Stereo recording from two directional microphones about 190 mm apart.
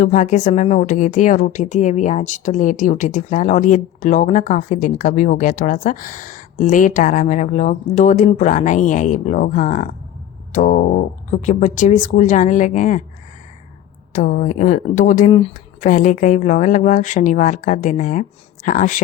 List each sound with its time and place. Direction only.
0.0 s a woman's voice: 40° left (ahead or behind)
14.1 s a woman's voice: 40° left (ahead or behind)
15.3 s speech: 30° left (ahead or behind)
15.8 s a woman's voice: 45° left (ahead or behind)